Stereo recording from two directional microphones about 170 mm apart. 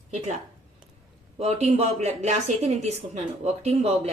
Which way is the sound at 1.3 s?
40° right (ahead or behind).